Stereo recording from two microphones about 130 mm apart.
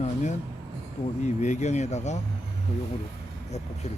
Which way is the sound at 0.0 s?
65° left (ahead or behind).